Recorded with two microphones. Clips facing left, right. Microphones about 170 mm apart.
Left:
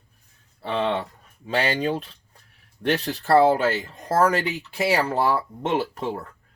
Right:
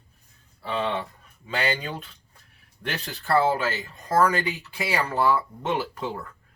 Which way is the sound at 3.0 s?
35° left (ahead or behind).